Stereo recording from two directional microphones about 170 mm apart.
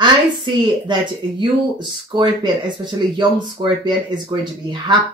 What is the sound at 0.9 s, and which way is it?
Speech, 25° right (ahead or behind).